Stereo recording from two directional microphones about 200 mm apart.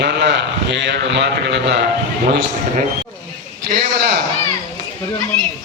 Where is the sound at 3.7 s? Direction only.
50° right (ahead or behind).